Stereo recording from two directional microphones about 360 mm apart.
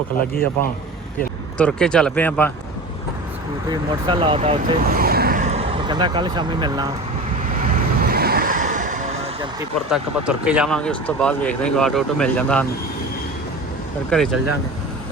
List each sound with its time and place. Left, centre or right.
0.2 s speech: left
1.5 s speech: centre
3.7 s speech: centre
7.7 s vehicle: right
9.4 s speech: centre
14.1 s speech: centre